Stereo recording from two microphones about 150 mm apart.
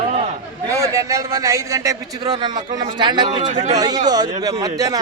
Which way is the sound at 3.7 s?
25° right (ahead or behind).